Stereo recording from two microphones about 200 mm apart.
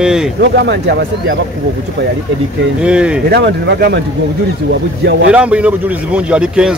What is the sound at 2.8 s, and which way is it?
Speech, 5° right (ahead or behind).